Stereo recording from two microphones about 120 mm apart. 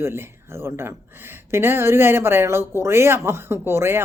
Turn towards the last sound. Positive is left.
turn(degrees=-20)  # may be behind; listen again after turning